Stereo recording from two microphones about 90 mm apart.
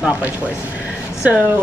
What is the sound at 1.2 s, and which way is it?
Speech, 20° right (ahead or behind).